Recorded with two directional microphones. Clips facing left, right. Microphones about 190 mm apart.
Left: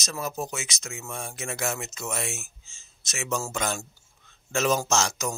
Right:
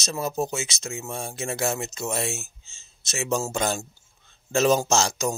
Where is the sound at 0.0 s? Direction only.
25° right (ahead or behind).